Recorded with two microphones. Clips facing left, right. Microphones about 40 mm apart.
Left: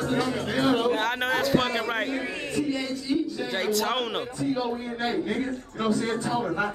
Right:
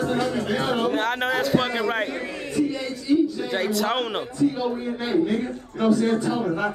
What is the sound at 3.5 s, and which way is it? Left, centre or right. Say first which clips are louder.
A man's voice: right 2 dB; centre.